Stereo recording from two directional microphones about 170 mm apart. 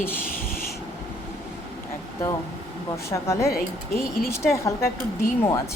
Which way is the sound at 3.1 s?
15° left (ahead or behind).